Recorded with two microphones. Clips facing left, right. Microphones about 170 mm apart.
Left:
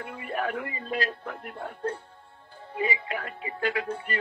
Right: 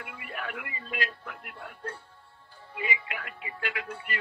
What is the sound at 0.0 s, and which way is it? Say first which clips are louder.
Speech: left 8 dB; 35° left (ahead or behind).